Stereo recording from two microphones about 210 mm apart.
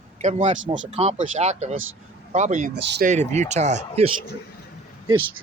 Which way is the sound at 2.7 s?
55° right (ahead or behind).